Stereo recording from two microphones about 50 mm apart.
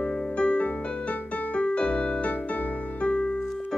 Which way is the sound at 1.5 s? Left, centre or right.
Left.